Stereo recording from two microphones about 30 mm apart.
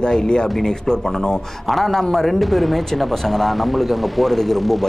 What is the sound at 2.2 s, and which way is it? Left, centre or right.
Speech, centre.